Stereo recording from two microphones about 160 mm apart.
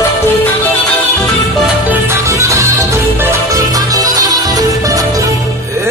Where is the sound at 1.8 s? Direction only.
15° right (ahead or behind).